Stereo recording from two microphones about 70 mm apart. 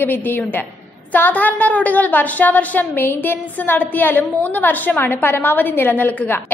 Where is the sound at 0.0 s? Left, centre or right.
Left.